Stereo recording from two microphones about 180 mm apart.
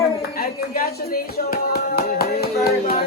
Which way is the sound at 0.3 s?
55° left (ahead or behind).